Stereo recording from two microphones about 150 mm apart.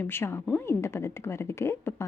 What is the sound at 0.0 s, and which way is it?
A woman's voice, 15° left (ahead or behind).